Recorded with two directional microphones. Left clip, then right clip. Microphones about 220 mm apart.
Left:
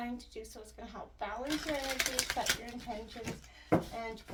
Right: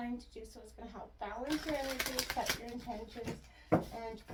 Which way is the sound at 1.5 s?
10° left (ahead or behind).